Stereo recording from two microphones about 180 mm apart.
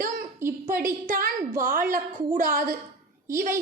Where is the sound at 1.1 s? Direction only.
50° right (ahead or behind).